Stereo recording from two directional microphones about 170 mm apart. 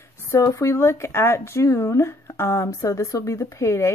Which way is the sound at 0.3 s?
15° left (ahead or behind).